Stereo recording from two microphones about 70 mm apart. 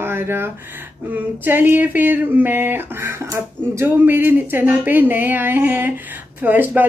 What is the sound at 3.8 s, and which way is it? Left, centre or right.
Speech, right.